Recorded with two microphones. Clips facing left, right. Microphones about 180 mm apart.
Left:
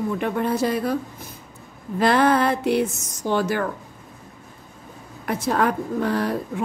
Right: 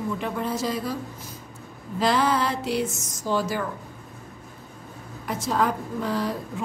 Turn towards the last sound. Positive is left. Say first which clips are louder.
# left 4 dB
turn(degrees=60)  # may be behind; listen again after turning